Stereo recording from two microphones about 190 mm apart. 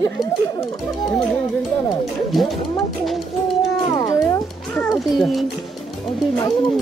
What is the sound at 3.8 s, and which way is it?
Music, 20° left (ahead or behind).